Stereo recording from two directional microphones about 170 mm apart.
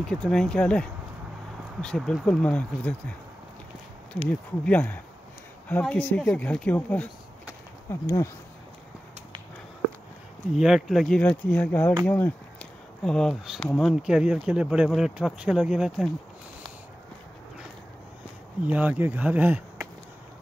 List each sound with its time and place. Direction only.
0.0 s speech: 5° left (ahead or behind)
4.1 s speech: 5° left (ahead or behind)
10.5 s speech: centre (ahead or behind)
13.0 s speech: centre (ahead or behind)
14.0 s speech: 5° right (ahead or behind)
18.7 s speech: 10° right (ahead or behind)